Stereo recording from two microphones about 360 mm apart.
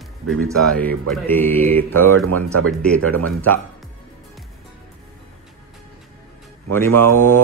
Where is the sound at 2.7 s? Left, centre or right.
Centre.